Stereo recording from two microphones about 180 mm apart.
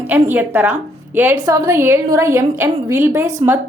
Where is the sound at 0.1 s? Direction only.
10° right (ahead or behind).